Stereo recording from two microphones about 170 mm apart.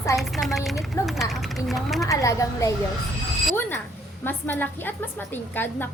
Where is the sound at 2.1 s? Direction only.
20° left (ahead or behind).